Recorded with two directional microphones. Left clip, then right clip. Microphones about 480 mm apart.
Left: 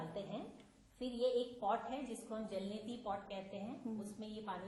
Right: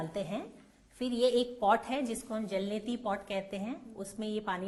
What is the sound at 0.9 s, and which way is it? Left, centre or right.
A woman's voice, right.